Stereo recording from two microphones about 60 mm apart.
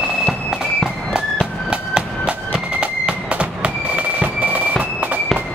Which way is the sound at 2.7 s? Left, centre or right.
Centre.